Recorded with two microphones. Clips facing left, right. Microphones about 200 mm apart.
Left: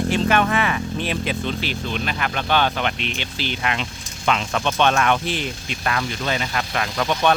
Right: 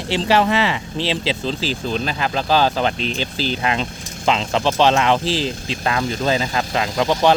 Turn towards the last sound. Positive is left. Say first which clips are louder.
# right 4 dB
turn(degrees=-25)  # may be behind; listen again after turning